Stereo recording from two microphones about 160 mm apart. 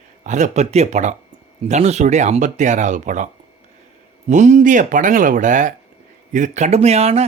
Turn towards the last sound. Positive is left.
turn(degrees=-40)  # may be behind; listen again after turning